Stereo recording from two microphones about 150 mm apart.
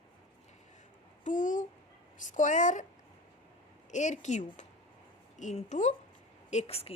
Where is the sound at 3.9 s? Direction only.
55° left (ahead or behind).